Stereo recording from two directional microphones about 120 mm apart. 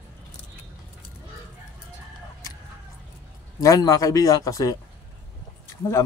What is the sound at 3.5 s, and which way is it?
Speech, 30° left (ahead or behind).